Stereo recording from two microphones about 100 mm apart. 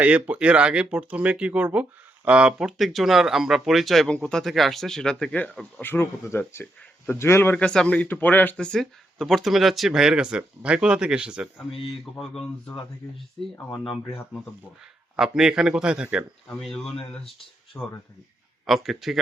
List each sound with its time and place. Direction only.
0.0 s speech: 15° right (ahead or behind); by 6.4 s 25° left (ahead or behind)
6.6 s speech: 5° left (ahead or behind)
7.1 s a man's voice: 25° left (ahead or behind)
7.5 s speech: 10° left (ahead or behind); by 11.4 s 10° right (ahead or behind)
12.2 s speech: 5° left (ahead or behind)
15.1 s speech: 5° right (ahead or behind)
16.6 s speech: centre (ahead or behind)
17.7 s a man's voice: 25° left (ahead or behind)
18.6 s speech: centre (ahead or behind)